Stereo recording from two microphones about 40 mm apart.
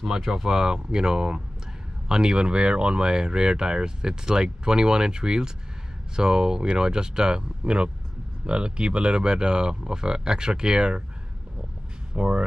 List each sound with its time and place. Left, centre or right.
0.0 s speech: centre
12.1 s speech: right